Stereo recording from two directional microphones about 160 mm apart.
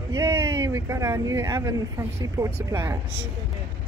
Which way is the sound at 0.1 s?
15° right (ahead or behind).